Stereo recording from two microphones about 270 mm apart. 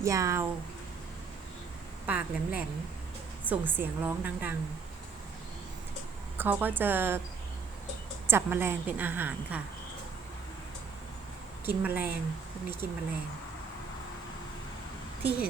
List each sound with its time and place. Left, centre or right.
0.0 s a woman's voice: centre
2.0 s a woman's voice: centre
6.3 s a woman's voice: centre
8.3 s a woman's voice: centre
11.6 s a woman's voice: centre
12.8 s speech: right
15.2 s speech: centre